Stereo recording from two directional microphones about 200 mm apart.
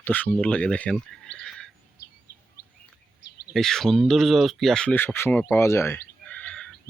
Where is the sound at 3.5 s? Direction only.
Centre (ahead or behind).